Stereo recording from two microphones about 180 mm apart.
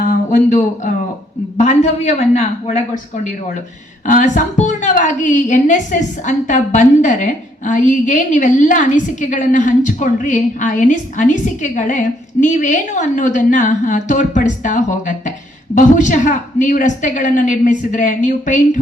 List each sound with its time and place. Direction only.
0.3 s a woman's voice: 45° left (ahead or behind)
4.0 s a woman's voice: 45° left (ahead or behind)